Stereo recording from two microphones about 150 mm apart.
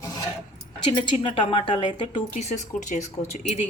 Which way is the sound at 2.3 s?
50° left (ahead or behind).